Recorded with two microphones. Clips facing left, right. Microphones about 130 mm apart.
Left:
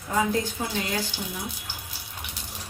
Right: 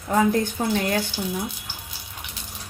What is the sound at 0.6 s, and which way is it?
Speech, 55° right (ahead or behind).